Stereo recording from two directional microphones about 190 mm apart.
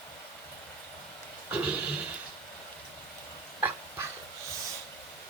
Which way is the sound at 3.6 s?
10° right (ahead or behind).